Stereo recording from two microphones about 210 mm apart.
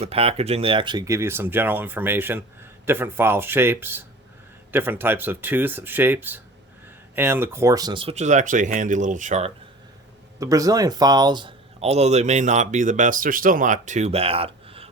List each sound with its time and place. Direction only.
0.0 s speech: 30° right (ahead or behind)
10.4 s speech: 15° right (ahead or behind)